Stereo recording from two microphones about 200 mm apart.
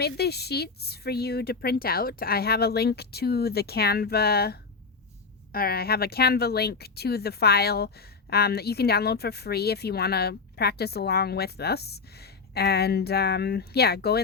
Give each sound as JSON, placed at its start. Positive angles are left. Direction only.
{"t": 0.0, "sound": "speech", "side_deg": 55}